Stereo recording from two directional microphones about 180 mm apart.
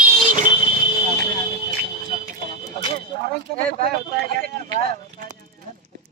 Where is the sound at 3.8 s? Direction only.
55° right (ahead or behind).